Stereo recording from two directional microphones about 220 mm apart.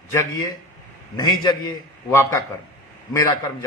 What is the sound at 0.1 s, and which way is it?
A man's voice, 15° left (ahead or behind).